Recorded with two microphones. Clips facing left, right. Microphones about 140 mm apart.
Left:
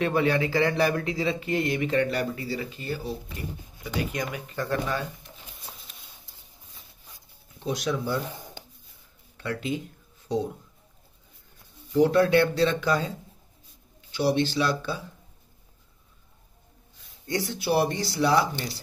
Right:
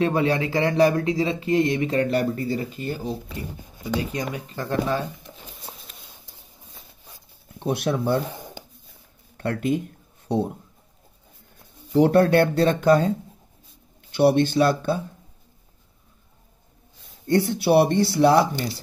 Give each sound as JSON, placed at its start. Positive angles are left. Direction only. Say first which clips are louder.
{"t": 0.0, "sound": "speech", "louder": "right 2 dB", "side_deg": -35}
{"t": 4.1, "sound": "speech", "louder": "right 3 dB", "side_deg": -35}
{"t": 7.5, "sound": "speech", "louder": "right 5 dB", "side_deg": -60}
{"t": 9.4, "sound": "speech", "louder": "right 6 dB", "side_deg": -55}
{"t": 11.9, "sound": "speech", "louder": "right 3 dB", "side_deg": -60}
{"t": 14.1, "sound": "speech", "louder": "right 6 dB", "side_deg": -60}
{"t": 17.3, "sound": "speech", "louder": "right 8 dB", "side_deg": -55}